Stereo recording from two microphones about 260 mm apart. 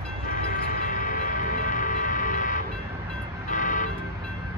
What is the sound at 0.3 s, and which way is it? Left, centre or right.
Music, left.